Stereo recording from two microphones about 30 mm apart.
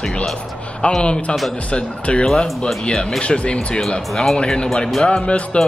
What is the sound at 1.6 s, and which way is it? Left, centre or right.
Speech, left.